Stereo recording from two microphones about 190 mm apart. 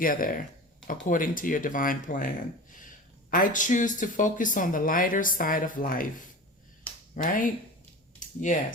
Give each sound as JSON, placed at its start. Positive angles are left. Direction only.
{"t": 0.0, "sound": "speech", "side_deg": 45}
{"t": 6.9, "sound": "finger snapping", "side_deg": 10}
{"t": 7.2, "sound": "speech", "side_deg": 45}